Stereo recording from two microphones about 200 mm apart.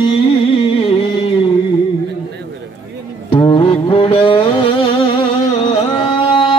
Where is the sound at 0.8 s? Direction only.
25° left (ahead or behind).